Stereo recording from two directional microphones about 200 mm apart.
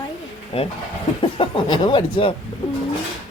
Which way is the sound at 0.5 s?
30° left (ahead or behind).